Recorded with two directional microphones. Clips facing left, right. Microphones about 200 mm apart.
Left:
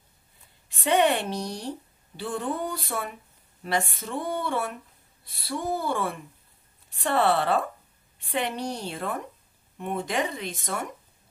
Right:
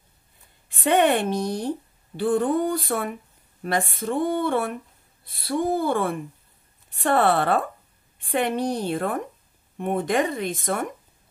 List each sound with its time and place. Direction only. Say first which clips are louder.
0.7 s speech: right 3 dB; 55° right (ahead or behind)